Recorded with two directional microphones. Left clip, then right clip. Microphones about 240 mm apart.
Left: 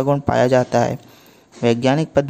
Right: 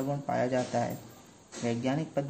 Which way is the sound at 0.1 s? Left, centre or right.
Left.